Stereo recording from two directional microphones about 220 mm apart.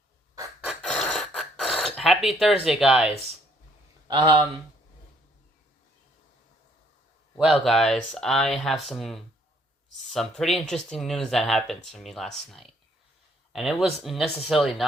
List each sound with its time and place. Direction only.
0.6 s a sound: centre (ahead or behind)
4.1 s speech: 20° right (ahead or behind)
7.3 s speech: centre (ahead or behind)